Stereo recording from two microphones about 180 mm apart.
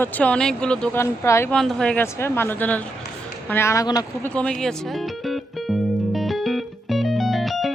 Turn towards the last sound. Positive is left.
turn(degrees=0)  # may be behind; listen again after turning